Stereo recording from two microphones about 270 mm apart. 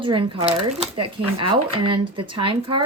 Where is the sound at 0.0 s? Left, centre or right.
Centre.